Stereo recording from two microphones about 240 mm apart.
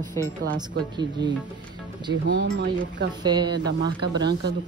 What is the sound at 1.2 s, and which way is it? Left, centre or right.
Music, right.